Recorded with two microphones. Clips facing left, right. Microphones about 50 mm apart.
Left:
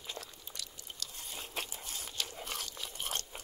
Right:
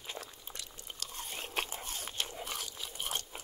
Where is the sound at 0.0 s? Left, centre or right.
Right.